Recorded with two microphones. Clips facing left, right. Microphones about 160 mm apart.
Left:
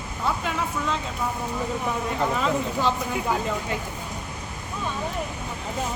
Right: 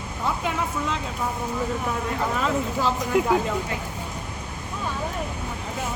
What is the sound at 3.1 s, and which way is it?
Speech, 90° right.